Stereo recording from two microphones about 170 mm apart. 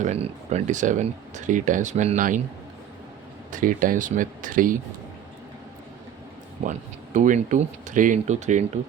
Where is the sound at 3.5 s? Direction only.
50° right (ahead or behind).